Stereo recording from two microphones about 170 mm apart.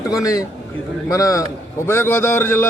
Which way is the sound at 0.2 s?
20° left (ahead or behind).